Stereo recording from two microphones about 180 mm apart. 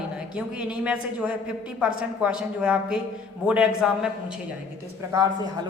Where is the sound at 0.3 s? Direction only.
5° right (ahead or behind).